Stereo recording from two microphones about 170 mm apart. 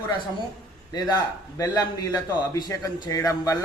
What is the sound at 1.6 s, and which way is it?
A man's voice, 25° left (ahead or behind).